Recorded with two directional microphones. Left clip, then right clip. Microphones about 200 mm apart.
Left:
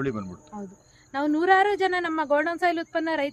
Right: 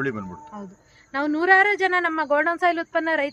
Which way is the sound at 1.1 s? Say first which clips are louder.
Right 3 dB; 25° right (ahead or behind).